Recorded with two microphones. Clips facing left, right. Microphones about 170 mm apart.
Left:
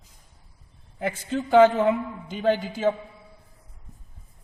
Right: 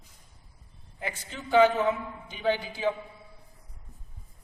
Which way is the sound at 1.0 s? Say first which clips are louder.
Left 10 dB; 60° left (ahead or behind).